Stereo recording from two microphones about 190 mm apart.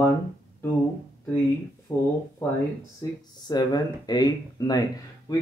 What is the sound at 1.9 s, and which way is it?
Speech, 15° left (ahead or behind).